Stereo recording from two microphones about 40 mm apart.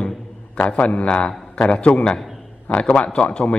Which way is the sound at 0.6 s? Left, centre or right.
Left.